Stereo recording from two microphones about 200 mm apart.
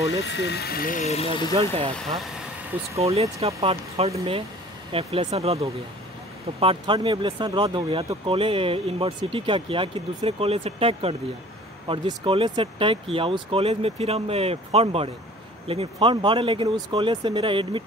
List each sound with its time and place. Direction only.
0.2 s speech: 60° left (ahead or behind); by 1.5 s 25° left (ahead or behind)
1.5 s speech: 25° right (ahead or behind)
3.0 s speech: 30° right (ahead or behind)